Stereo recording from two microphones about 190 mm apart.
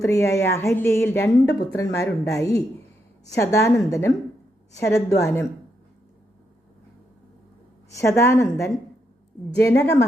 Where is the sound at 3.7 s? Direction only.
15° left (ahead or behind).